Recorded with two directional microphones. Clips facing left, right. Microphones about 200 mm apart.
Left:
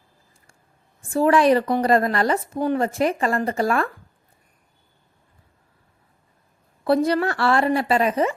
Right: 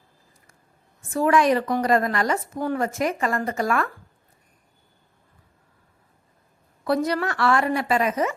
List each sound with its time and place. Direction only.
1.1 s speech: 30° left (ahead or behind)
2.6 s speech: 20° left (ahead or behind)
2.8 s speech: 30° left (ahead or behind)
6.8 s speech: 30° left (ahead or behind)